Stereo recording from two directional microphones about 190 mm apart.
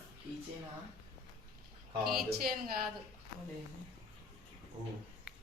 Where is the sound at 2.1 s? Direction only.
50° right (ahead or behind).